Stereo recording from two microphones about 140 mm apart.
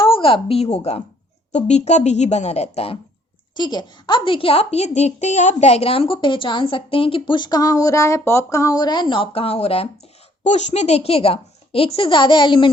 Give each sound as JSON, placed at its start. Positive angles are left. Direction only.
{"t": 0.0, "sound": "a woman's voice", "side_deg": 40}
{"t": 3.5, "sound": "speech", "side_deg": 30}
{"t": 10.4, "sound": "a woman's voice", "side_deg": 55}